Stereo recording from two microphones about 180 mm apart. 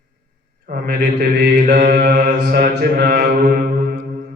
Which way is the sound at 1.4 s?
50° right (ahead or behind).